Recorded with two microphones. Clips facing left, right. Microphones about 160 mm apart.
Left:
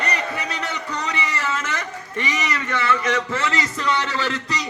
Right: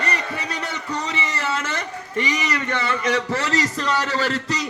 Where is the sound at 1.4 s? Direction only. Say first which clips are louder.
Even; 35° right (ahead or behind).